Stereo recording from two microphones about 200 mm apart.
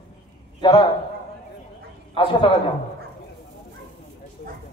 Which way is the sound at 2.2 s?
25° left (ahead or behind).